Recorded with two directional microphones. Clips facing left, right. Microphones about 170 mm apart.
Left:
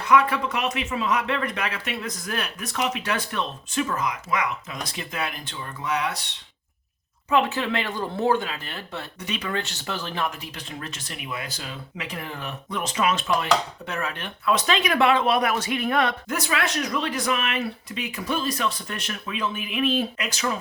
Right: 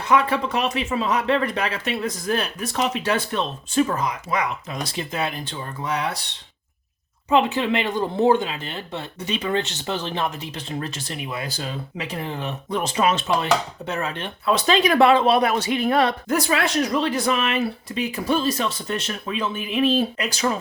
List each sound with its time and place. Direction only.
0.0 s speech: 30° right (ahead or behind)
7.3 s speech: 20° right (ahead or behind)